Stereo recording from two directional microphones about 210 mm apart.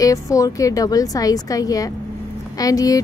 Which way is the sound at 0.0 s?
15° left (ahead or behind).